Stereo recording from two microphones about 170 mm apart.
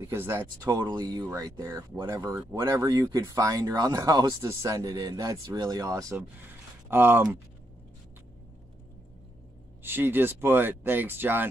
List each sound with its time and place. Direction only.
0.1 s speech: 15° right (ahead or behind)
9.8 s speech: 10° right (ahead or behind)